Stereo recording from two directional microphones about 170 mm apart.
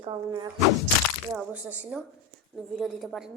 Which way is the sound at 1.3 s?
5° right (ahead or behind).